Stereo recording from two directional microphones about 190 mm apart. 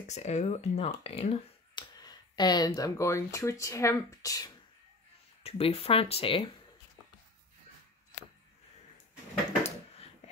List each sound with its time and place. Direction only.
0.0 s speech: 35° left (ahead or behind); by 4.5 s 20° left (ahead or behind)
5.4 s speech: 30° left (ahead or behind)
9.6 s a sound: 30° left (ahead or behind)